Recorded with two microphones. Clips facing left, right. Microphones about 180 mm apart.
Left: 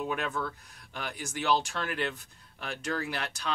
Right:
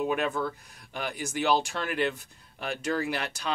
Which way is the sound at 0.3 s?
25° right (ahead or behind).